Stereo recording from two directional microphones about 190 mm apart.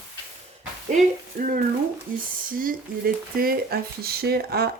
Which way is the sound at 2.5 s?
50° right (ahead or behind).